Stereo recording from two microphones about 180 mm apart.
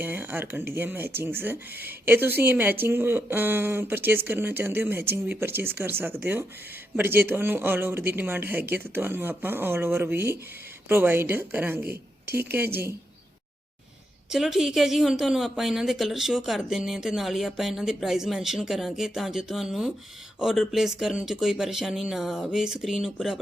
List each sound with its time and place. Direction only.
0.0 s speech: 10° right (ahead or behind)
14.3 s speech: centre (ahead or behind)